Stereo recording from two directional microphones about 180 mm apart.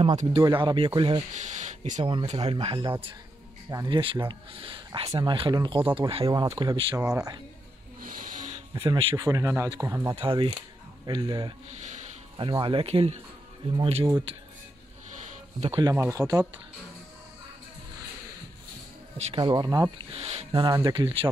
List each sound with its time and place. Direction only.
0.0 s speech: 35° right (ahead or behind)
0.4 s speech: 25° right (ahead or behind)
1.3 s a sound: 40° right (ahead or behind)
2.0 s speech: 25° right (ahead or behind)
6.4 s speech: 20° right (ahead or behind)
8.0 s music: 50° right (ahead or behind)
8.7 s speech: 25° right (ahead or behind)
10.1 s speech: 30° right (ahead or behind)
15.7 s speech: 15° right (ahead or behind)
19.1 s speech: 25° right (ahead or behind)
20.1 s speech: 35° right (ahead or behind)
20.6 s speech: 20° right (ahead or behind)